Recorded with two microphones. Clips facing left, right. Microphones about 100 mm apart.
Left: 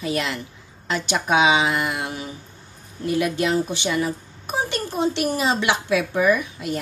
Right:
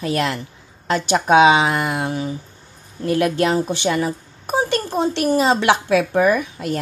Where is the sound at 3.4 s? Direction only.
40° right (ahead or behind).